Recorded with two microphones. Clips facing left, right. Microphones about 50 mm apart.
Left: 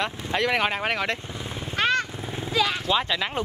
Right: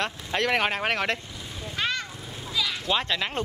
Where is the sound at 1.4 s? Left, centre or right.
Left.